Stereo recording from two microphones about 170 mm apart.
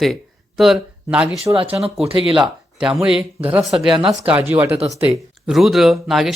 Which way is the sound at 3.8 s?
25° right (ahead or behind).